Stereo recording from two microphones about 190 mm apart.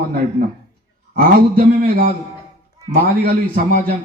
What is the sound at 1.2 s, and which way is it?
A man's voice, 50° right (ahead or behind).